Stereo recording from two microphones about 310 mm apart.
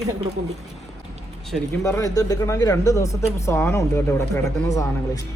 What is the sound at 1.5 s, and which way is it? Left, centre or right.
Speech, centre.